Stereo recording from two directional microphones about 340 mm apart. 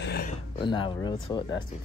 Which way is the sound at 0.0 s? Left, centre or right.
Left.